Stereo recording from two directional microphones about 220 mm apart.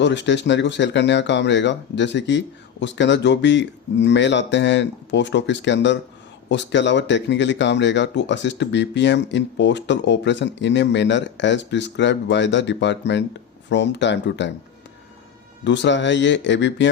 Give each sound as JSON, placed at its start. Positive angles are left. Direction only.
{"t": 0.0, "sound": "speech", "side_deg": 55}
{"t": 15.6, "sound": "speech", "side_deg": 55}